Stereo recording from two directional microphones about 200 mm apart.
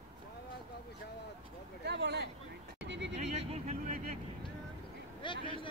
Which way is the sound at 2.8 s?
60° right (ahead or behind).